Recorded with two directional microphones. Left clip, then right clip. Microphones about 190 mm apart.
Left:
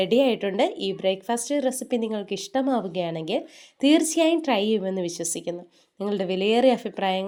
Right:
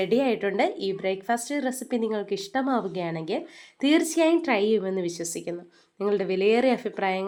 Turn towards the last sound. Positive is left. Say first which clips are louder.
# left 2 dB
turn(degrees=30)  # may be behind; listen again after turning